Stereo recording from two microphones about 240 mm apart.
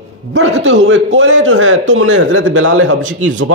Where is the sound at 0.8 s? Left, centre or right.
Right.